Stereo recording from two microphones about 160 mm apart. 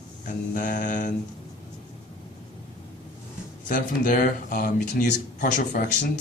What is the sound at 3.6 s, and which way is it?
Speech, 60° left (ahead or behind).